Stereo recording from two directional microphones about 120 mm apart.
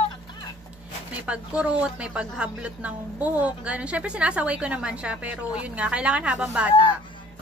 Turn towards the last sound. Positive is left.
turn(degrees=-10)  # may be behind; listen again after turning